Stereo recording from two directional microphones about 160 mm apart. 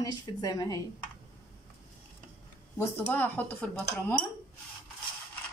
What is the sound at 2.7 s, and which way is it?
A woman's voice, 15° left (ahead or behind).